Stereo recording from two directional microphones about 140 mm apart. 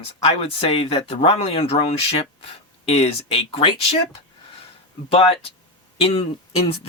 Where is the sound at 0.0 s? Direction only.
45° left (ahead or behind).